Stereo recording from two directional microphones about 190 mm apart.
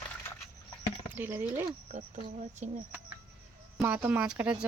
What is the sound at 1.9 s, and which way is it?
Speech, 35° right (ahead or behind).